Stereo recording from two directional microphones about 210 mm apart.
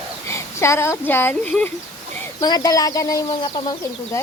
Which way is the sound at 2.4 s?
20° left (ahead or behind).